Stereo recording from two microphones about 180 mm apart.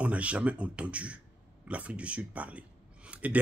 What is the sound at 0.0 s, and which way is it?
Speech, 5° right (ahead or behind).